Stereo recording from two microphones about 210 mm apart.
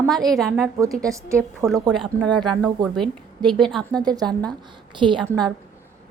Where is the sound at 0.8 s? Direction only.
15° right (ahead or behind).